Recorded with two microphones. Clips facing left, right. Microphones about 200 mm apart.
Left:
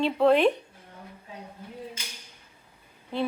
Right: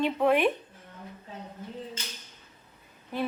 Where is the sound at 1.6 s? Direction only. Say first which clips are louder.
Right 2 dB; 10° left (ahead or behind).